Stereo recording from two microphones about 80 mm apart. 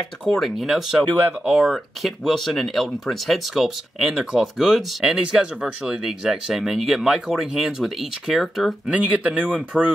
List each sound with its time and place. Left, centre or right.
0.2 s speech: centre
8.8 s speech: centre
9.7 s speech: centre